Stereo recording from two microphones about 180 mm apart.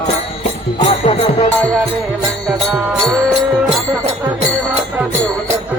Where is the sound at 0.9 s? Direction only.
30° left (ahead or behind).